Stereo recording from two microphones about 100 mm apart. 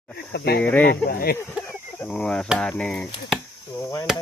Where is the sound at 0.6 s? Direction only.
15° left (ahead or behind).